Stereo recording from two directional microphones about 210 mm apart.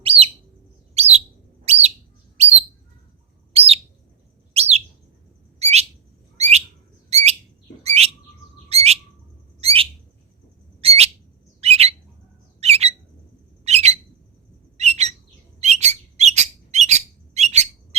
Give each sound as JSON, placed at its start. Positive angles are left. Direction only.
{"t": 0.0, "sound": "bird", "side_deg": -25}
{"t": 5.5, "sound": "bird", "side_deg": -30}
{"t": 10.8, "sound": "a sound", "side_deg": -30}
{"t": 11.6, "sound": "bird", "side_deg": -30}
{"t": 12.5, "sound": "squawk", "side_deg": -30}
{"t": 14.8, "sound": "bird", "side_deg": -30}